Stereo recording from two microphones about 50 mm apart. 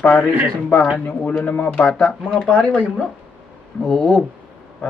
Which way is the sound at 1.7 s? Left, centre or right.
Centre.